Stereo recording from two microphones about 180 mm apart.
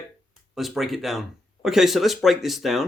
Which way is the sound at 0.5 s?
Centre (ahead or behind).